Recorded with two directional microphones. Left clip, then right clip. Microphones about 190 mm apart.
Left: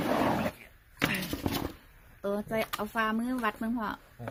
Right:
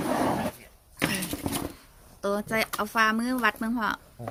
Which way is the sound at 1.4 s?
10° left (ahead or behind).